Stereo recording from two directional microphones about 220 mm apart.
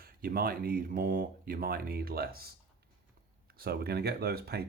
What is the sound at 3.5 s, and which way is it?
Speech, 45° right (ahead or behind).